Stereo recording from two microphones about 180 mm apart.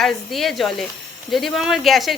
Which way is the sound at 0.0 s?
Centre (ahead or behind).